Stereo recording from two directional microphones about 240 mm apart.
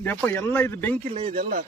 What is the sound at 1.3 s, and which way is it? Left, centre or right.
Speech, right.